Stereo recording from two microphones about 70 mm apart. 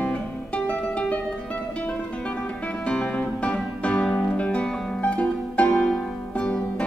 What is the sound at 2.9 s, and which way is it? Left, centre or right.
Music, centre.